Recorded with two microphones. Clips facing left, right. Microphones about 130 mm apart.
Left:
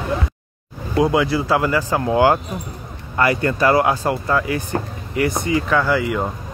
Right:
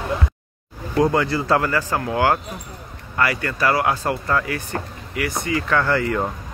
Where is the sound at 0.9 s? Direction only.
10° left (ahead or behind).